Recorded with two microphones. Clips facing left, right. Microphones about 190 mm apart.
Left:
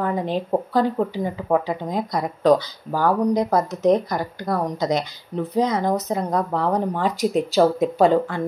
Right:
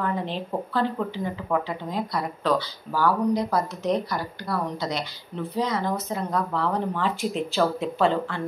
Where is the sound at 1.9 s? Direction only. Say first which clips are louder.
Left 2 dB; 45° left (ahead or behind).